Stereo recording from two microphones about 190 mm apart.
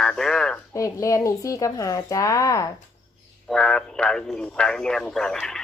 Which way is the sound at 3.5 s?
5° left (ahead or behind).